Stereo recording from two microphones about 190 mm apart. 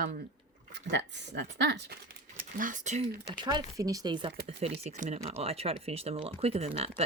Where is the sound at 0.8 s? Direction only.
65° right (ahead or behind).